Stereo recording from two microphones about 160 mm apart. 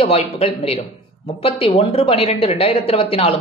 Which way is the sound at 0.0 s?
40° left (ahead or behind).